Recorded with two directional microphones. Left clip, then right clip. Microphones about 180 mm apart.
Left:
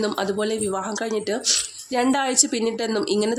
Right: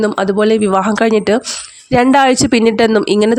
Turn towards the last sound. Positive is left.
turn(degrees=-50)  # may be behind; listen again after turning